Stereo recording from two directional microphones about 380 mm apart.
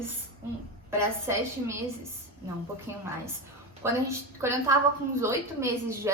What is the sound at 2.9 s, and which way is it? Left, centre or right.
A woman's voice, centre.